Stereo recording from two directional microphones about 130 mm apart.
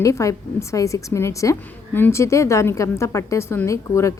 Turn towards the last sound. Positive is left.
turn(degrees=20)  # may be behind; listen again after turning